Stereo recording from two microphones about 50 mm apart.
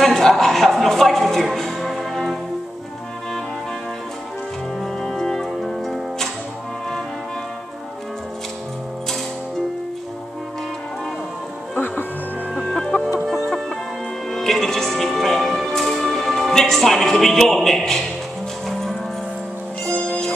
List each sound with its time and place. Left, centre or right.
0.0 s music: centre
5.0 s music: centre
11.7 s music: left
12.5 s chicken: centre
14.3 s music: centre
20.1 s music: centre